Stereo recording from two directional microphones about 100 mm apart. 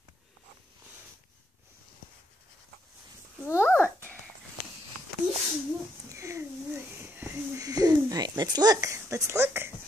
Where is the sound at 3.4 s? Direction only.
25° left (ahead or behind).